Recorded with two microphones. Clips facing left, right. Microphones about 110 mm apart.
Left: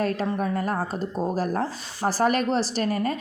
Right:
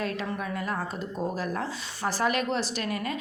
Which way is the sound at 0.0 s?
40° left (ahead or behind).